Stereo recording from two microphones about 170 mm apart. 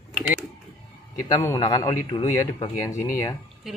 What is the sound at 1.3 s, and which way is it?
A man's voice, 20° left (ahead or behind).